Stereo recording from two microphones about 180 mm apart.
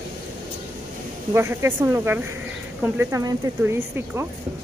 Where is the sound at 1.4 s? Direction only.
15° right (ahead or behind).